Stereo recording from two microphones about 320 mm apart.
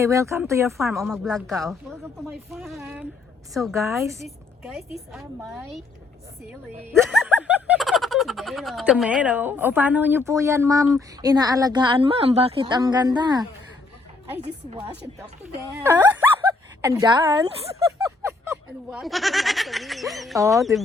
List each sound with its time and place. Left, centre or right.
0.0 s speech: centre
14.4 s speech: centre
15.8 s speech: centre